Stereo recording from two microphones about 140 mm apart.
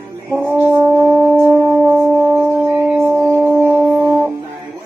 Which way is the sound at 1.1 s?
15° left (ahead or behind).